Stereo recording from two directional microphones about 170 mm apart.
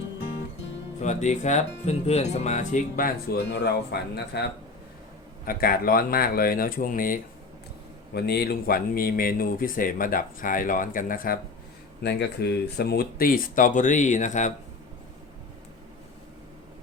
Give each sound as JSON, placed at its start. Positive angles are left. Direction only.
{"t": 1.0, "sound": "speech", "side_deg": 45}
{"t": 3.3, "sound": "speech", "side_deg": 85}
{"t": 5.5, "sound": "speech", "side_deg": 60}
{"t": 8.1, "sound": "speech", "side_deg": 70}
{"t": 12.0, "sound": "speech", "side_deg": 75}